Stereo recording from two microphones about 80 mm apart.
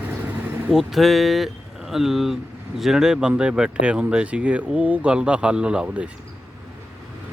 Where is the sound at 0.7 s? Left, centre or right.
Centre.